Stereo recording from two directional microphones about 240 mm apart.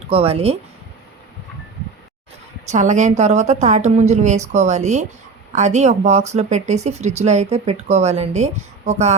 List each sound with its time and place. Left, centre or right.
0.1 s a woman's voice: right
2.6 s a woman's voice: right